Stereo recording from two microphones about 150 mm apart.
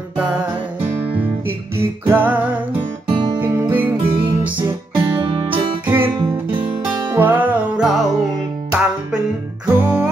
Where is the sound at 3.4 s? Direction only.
15° right (ahead or behind).